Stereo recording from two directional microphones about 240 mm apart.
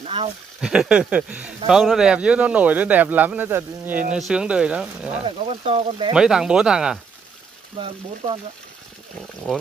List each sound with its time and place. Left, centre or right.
0.0 s a sound: right
0.6 s speech: centre
5.1 s speech: right
6.1 s speech: centre